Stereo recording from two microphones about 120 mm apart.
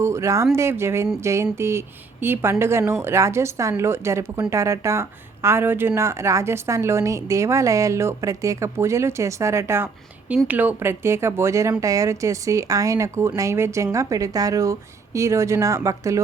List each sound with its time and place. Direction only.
0.0 s a woman's voice: 25° right (ahead or behind)